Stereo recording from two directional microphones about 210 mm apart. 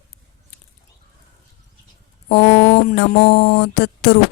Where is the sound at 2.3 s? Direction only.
50° left (ahead or behind).